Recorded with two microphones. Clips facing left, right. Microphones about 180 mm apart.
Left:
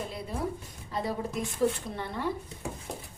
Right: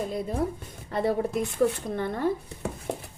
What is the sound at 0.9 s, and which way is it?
A woman's voice, 60° right (ahead or behind).